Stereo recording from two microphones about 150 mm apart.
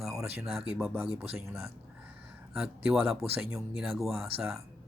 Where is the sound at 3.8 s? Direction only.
Centre (ahead or behind).